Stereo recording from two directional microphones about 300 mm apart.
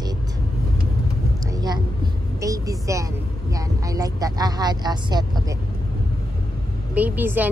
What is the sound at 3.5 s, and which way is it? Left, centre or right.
Speech, centre.